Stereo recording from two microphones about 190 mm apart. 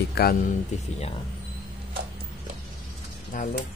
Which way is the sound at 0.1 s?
55° left (ahead or behind).